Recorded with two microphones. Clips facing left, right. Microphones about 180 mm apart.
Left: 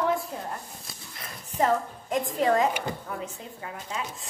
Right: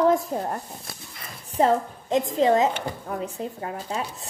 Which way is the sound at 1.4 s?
30° right (ahead or behind).